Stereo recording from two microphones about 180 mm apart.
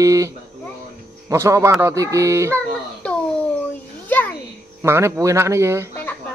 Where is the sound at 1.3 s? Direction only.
15° right (ahead or behind).